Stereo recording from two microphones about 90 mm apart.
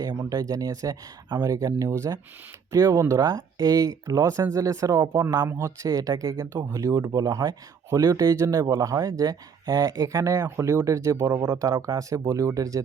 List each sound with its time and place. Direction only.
0.0 s speech: 45° right (ahead or behind)